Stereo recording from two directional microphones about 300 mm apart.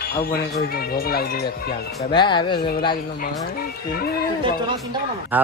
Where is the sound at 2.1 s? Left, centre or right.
Centre.